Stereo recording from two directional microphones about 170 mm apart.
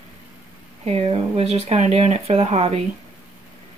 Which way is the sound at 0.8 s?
35° right (ahead or behind).